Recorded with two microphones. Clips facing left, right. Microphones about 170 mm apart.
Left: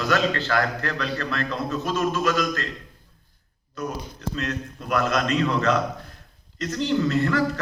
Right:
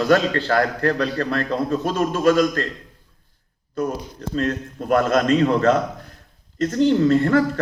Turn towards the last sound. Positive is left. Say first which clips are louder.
# right 6 dB
turn(degrees=-50)  # may be behind; listen again after turning